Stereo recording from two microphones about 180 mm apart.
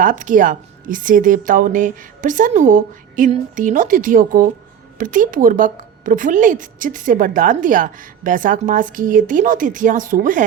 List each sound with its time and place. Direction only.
0.0 s a woman's voice: 45° right (ahead or behind)